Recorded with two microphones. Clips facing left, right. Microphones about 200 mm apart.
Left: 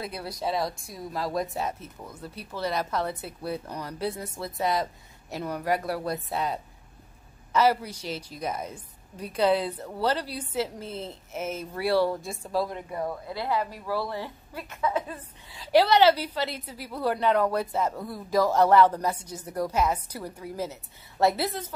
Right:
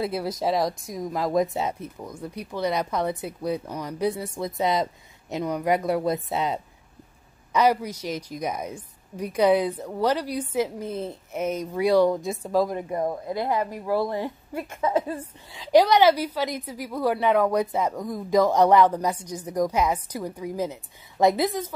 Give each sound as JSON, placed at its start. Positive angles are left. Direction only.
{"t": 0.0, "sound": "a woman's voice", "side_deg": -20}
{"t": 13.3, "sound": "a woman's voice", "side_deg": -45}
{"t": 15.7, "sound": "a woman's voice", "side_deg": -10}